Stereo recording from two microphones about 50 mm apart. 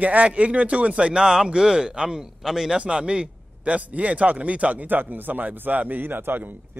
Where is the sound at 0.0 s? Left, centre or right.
Right; by 2.8 s centre.